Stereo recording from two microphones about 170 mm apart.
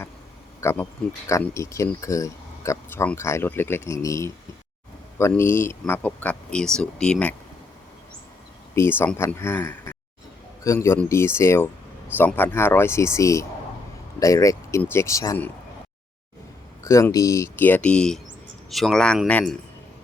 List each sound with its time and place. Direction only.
0.6 s speech: 15° left (ahead or behind)
5.3 s speech: 15° left (ahead or behind)
8.7 s speech: 15° left (ahead or behind)
16.8 s speech: 20° left (ahead or behind)